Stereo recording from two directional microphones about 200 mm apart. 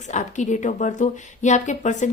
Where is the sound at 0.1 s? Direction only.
35° left (ahead or behind).